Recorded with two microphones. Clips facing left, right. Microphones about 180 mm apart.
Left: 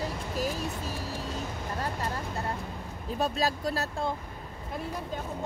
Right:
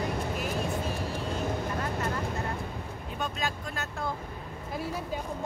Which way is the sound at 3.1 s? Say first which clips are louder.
Left 5 dB; 35° left (ahead or behind).